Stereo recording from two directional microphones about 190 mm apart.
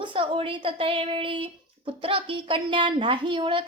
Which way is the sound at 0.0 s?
25° right (ahead or behind).